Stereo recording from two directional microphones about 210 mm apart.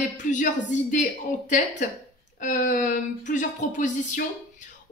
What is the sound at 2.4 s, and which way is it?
A woman's voice, 35° left (ahead or behind).